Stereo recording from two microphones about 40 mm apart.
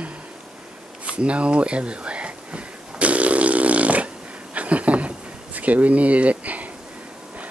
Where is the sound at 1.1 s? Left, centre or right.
Right.